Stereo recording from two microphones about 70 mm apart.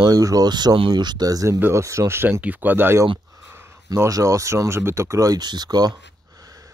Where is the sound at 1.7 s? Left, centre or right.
Right.